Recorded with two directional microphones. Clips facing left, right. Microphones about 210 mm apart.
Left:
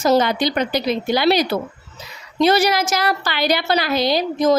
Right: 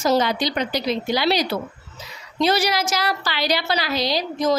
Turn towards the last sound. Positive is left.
turn(degrees=55)  # may be behind; listen again after turning